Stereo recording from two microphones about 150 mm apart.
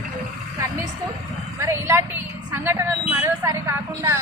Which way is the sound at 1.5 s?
20° right (ahead or behind).